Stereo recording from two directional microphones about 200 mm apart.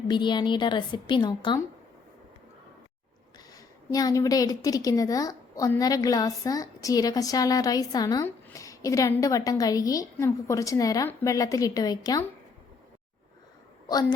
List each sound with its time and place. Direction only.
0.1 s a woman's voice: 20° left (ahead or behind)
3.9 s a woman's voice: 15° left (ahead or behind)